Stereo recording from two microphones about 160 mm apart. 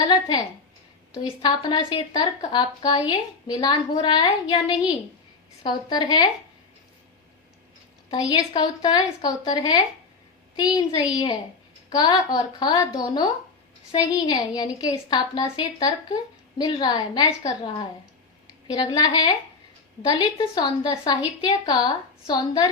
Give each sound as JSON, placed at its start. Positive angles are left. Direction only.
{"t": 0.0, "sound": "a woman's voice", "side_deg": 25}
{"t": 8.3, "sound": "a woman's voice", "side_deg": 25}